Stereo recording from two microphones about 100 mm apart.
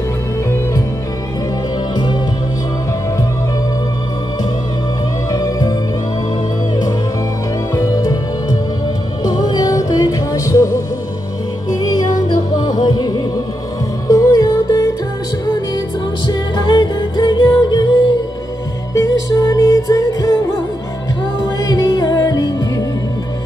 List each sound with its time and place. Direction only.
5.3 s music: 40° left (ahead or behind)
7.7 s music: 35° left (ahead or behind)
11.7 s music: 40° left (ahead or behind)
16.3 s music: 45° left (ahead or behind)
18.9 s music: 35° left (ahead or behind)
21.6 s music: 40° left (ahead or behind)